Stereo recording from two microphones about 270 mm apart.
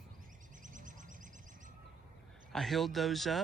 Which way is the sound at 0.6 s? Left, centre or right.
Right.